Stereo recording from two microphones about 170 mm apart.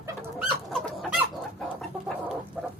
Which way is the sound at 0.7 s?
Centre (ahead or behind).